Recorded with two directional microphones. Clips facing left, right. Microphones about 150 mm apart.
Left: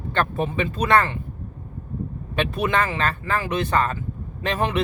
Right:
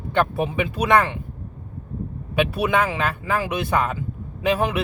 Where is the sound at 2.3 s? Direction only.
10° right (ahead or behind).